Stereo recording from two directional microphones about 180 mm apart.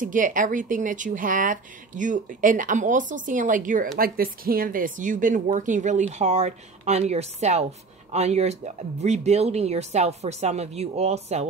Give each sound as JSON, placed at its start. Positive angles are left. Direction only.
{"t": 0.0, "sound": "speech", "side_deg": -45}